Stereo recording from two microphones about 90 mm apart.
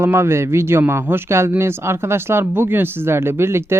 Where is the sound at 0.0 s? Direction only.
30° right (ahead or behind).